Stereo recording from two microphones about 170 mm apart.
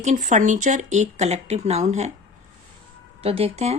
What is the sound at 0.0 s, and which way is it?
Speech, 45° right (ahead or behind).